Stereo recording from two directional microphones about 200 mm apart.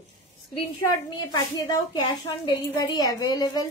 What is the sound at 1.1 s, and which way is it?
A woman's voice, 20° left (ahead or behind).